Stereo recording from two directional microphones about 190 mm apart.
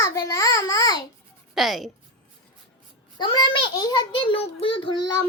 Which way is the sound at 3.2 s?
25° left (ahead or behind).